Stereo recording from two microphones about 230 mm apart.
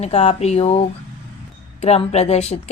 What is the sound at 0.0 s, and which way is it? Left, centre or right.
A woman's voice, left.